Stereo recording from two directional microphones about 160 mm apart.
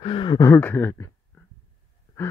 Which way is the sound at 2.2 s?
15° left (ahead or behind).